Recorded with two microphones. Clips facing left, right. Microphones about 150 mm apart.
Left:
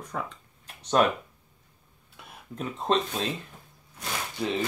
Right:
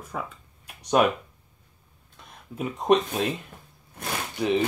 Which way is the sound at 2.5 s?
15° right (ahead or behind).